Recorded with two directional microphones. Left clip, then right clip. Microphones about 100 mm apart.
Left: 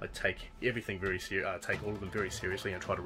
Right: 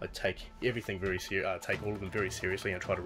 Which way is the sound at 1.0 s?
25° right (ahead or behind).